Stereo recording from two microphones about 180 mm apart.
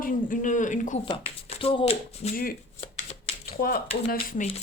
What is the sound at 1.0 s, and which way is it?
Speech, 30° left (ahead or behind).